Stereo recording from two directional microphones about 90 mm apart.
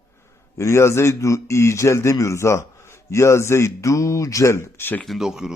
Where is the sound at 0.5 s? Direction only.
35° left (ahead or behind).